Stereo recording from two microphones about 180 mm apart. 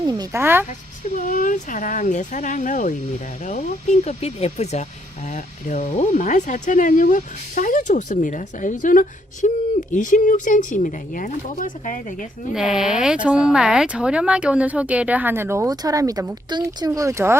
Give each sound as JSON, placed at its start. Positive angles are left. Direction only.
{"t": 0.0, "sound": "speech", "side_deg": -20}
{"t": 1.1, "sound": "speech", "side_deg": 50}
{"t": 12.5, "sound": "speech", "side_deg": -5}